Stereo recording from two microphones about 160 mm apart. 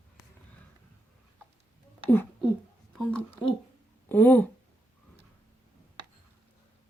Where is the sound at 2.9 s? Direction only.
5° left (ahead or behind).